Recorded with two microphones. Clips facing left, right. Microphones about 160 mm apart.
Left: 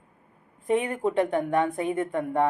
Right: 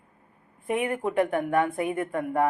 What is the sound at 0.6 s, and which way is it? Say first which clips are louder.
Speech: left 2 dB; 30° left (ahead or behind).